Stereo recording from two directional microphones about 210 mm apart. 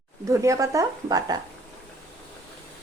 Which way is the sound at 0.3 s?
15° right (ahead or behind).